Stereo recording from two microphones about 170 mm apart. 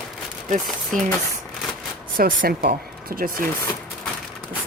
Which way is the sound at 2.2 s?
60° right (ahead or behind).